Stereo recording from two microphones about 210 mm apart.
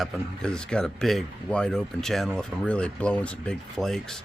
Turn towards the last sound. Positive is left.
turn(degrees=0)  # may be behind; listen again after turning